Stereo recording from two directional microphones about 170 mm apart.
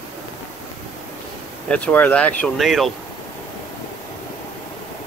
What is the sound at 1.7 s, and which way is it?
Speech, 10° left (ahead or behind).